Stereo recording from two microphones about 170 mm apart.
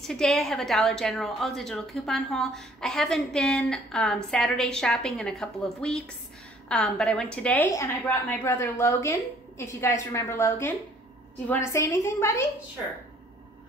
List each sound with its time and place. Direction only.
0.0 s a woman's voice: centre (ahead or behind)
7.6 s a woman's voice: 20° left (ahead or behind)